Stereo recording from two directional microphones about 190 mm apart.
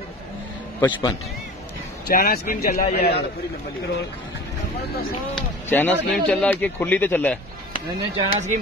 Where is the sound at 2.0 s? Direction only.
50° left (ahead or behind).